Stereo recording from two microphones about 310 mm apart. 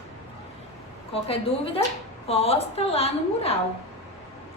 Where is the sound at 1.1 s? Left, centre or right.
Centre.